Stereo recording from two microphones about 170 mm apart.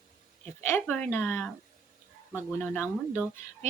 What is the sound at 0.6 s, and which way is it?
Speech, 10° left (ahead or behind).